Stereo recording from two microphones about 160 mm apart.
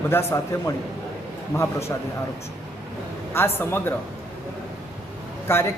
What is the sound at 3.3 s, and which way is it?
Speech, 15° left (ahead or behind).